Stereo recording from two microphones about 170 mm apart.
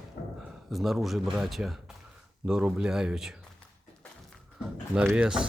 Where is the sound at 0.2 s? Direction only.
60° left (ahead or behind).